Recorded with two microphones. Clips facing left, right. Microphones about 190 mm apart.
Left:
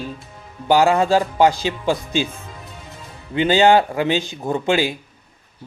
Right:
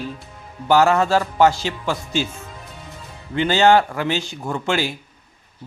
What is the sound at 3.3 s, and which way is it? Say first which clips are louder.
Speech: left 1 dB; 15° left (ahead or behind).